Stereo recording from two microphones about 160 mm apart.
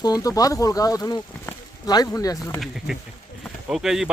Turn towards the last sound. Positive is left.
turn(degrees=-5)  # may be behind; listen again after turning